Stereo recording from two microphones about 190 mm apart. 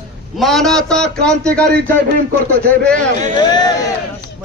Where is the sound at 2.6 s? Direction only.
5° left (ahead or behind).